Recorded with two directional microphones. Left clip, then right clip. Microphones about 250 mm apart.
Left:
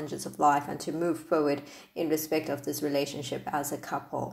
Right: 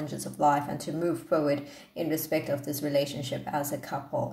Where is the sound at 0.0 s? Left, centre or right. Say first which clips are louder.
Even; centre.